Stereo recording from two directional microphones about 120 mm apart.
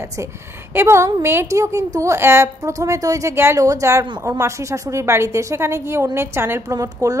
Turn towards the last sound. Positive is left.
turn(degrees=-30)  # may be behind; listen again after turning